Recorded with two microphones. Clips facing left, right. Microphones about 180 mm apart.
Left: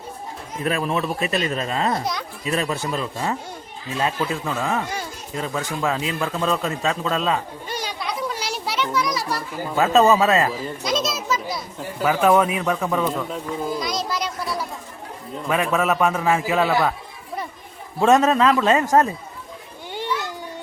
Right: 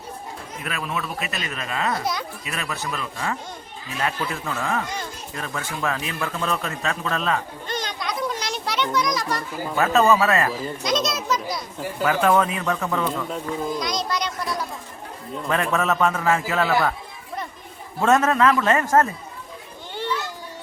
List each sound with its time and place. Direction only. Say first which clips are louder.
0.6 s a man's voice: left 7 dB; 30° left (ahead or behind); by 9.4 s 5° left (ahead or behind)
9.7 s speech: left 2 dB; 20° left (ahead or behind)
10.5 s a man's voice: even; centre (ahead or behind)
18.0 s a man's voice: left 2 dB; 20° left (ahead or behind)
19.9 s children playing: left 1 dB; 15° left (ahead or behind)